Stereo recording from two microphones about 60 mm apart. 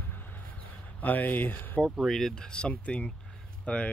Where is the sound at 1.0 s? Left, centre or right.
Left.